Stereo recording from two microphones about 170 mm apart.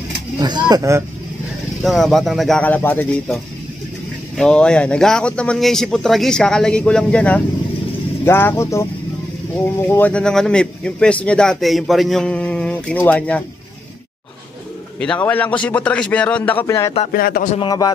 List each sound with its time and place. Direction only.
0.4 s speech: 25° right (ahead or behind)
1.8 s speech: centre (ahead or behind)
4.4 s speech: 5° left (ahead or behind)
9.8 s speech: 10° left (ahead or behind)
15.0 s speech: 5° left (ahead or behind)
17.1 s a man's voice: 60° left (ahead or behind)
17.6 s a man's voice: 25° left (ahead or behind)